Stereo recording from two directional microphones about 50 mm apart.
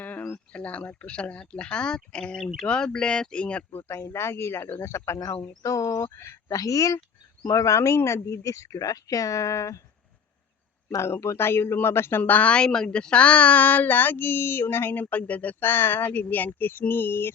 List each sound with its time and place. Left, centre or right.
0.0 s cricket: left
0.5 s speech: left
3.7 s speech: left
3.9 s speech: left
5.6 s speech: left
10.9 s speech: left
12.2 s a woman's voice: left
12.5 s a woman's voice: centre; by 15.5 s left
15.6 s speech: left